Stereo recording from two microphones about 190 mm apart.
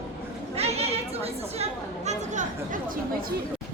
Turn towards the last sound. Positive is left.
turn(degrees=-45)  # may be behind; listen again after turning